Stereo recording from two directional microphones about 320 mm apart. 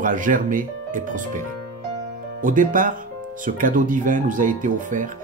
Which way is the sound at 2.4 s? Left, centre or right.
Right.